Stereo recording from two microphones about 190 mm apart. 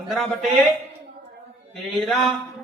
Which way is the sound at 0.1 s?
Centre (ahead or behind).